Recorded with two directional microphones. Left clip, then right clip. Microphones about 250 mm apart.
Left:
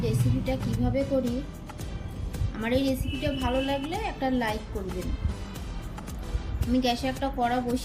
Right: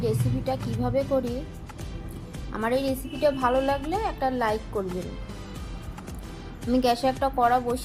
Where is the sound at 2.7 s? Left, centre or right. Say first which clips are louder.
Even; centre.